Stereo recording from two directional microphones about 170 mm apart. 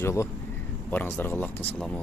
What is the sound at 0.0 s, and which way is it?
Speech, 15° left (ahead or behind).